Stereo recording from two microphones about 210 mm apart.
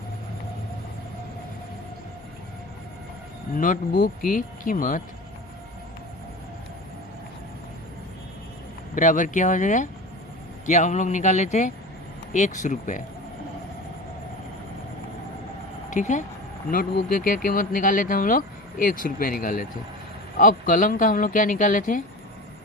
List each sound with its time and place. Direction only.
3.5 s speech: 40° left (ahead or behind)
9.0 s speech: 35° left (ahead or behind)
15.9 s speech: 35° left (ahead or behind)